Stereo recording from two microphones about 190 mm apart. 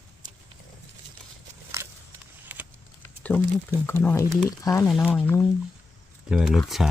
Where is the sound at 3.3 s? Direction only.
10° left (ahead or behind).